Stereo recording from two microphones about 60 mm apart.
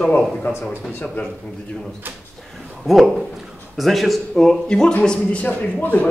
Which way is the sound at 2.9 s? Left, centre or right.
Centre.